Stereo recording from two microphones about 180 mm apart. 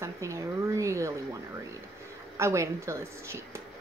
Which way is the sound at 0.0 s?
15° right (ahead or behind).